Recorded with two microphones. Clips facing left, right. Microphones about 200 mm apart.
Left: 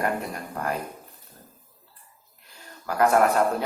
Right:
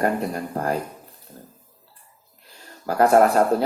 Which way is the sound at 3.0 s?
35° right (ahead or behind).